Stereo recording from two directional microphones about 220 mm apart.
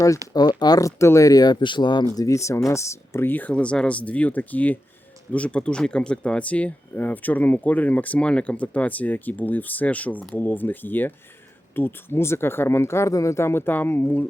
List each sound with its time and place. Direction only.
0.3 s speech: 20° left (ahead or behind)